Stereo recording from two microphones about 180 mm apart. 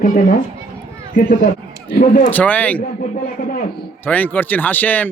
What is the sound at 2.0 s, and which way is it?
Speech, 50° left (ahead or behind).